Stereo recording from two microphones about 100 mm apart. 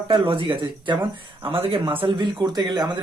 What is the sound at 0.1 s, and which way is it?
Speech, 60° right (ahead or behind).